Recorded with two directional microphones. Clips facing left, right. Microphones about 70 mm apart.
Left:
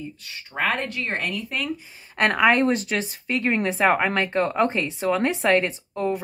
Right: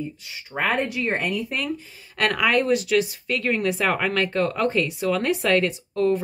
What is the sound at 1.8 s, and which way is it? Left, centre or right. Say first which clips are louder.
Speech: left 2 dB; left.